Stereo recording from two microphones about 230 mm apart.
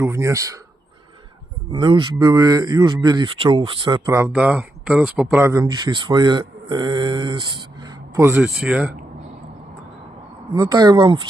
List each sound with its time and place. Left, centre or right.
0.0 s speech: centre
1.7 s speech: right
8.1 s speech: centre
10.5 s speech: centre